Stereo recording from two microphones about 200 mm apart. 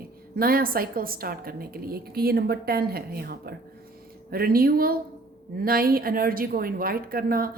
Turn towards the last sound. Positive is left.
turn(degrees=-45)  # may be behind; listen again after turning